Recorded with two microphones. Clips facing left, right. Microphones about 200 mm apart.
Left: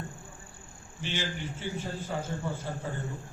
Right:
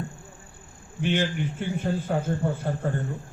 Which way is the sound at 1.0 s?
55° right (ahead or behind).